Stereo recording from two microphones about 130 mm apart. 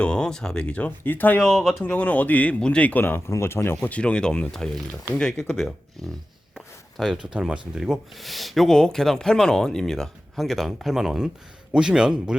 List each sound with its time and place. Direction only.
0.0 s speech: 5° left (ahead or behind)
6.5 s a sound: 5° right (ahead or behind)
7.8 s speech: centre (ahead or behind)